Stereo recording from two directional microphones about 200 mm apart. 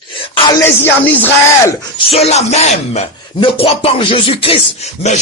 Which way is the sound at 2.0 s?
30° left (ahead or behind).